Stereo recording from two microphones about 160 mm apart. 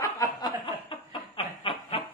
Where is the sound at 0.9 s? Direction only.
35° left (ahead or behind).